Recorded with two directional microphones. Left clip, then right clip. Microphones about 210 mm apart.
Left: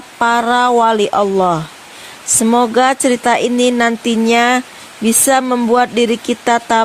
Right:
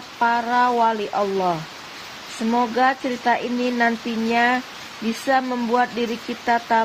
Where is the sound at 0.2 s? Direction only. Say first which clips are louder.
Left 6 dB; 55° left (ahead or behind).